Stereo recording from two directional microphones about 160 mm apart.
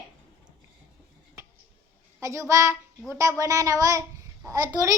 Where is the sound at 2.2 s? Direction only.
20° right (ahead or behind).